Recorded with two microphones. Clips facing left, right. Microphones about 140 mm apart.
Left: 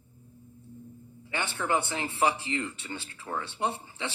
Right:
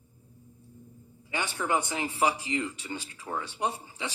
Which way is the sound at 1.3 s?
15° right (ahead or behind).